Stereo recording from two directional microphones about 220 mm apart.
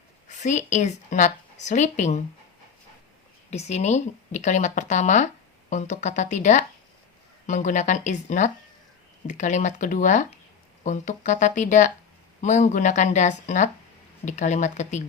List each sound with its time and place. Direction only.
0.3 s a woman's voice: 35° left (ahead or behind)
3.5 s speech: 30° left (ahead or behind)